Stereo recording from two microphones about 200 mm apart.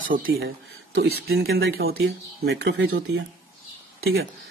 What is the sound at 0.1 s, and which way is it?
Speech, 50° right (ahead or behind).